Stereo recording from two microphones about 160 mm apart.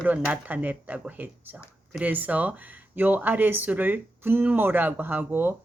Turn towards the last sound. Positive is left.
turn(degrees=-15)  # may be behind; listen again after turning